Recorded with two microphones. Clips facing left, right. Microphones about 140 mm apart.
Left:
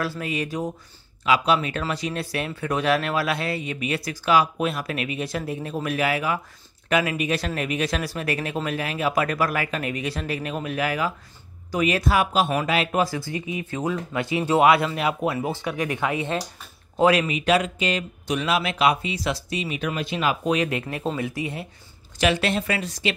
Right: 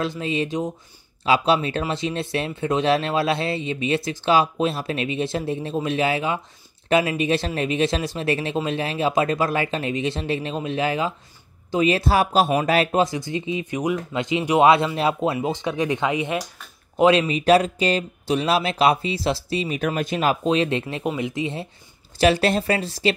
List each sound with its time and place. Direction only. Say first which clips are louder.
0.0 s speech: right 3 dB; 20° right (ahead or behind); by 12.9 s 40° right (ahead or behind)
12.9 s speech: right 3 dB; 20° right (ahead or behind)
17.4 s speech: right 5 dB; 35° right (ahead or behind)
19.8 s speech: right 2 dB; 45° right (ahead or behind)
20.4 s speech: right 3 dB; 25° right (ahead or behind)
22.2 s speech: right 4 dB; 35° right (ahead or behind)